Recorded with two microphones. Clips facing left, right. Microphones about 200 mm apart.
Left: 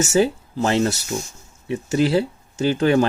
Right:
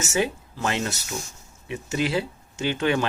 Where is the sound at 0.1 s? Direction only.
35° left (ahead or behind).